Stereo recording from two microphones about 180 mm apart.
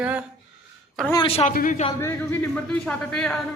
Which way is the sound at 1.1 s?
30° left (ahead or behind).